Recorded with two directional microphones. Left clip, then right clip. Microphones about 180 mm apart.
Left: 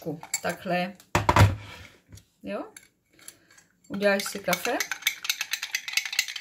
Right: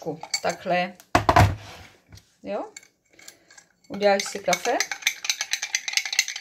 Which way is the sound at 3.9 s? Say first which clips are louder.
Right 3 dB; 20° left (ahead or behind).